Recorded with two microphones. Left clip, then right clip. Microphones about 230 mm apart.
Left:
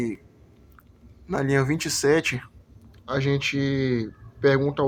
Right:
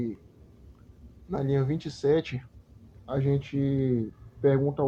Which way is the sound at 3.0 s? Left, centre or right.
Left.